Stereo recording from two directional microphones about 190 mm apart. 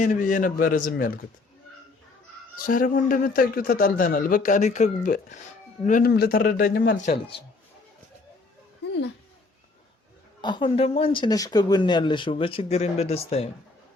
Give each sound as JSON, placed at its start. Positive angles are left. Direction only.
{"t": 0.0, "sound": "a man's voice", "side_deg": 45}
{"t": 2.6, "sound": "a man's voice", "side_deg": 45}
{"t": 10.4, "sound": "speech", "side_deg": 25}